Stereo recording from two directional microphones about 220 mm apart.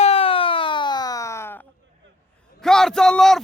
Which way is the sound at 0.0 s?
25° left (ahead or behind).